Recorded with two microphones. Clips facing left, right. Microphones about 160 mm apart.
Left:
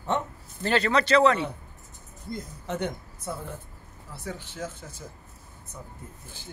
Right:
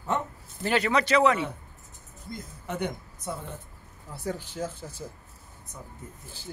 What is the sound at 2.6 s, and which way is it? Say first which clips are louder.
Speech: even; 10° right (ahead or behind).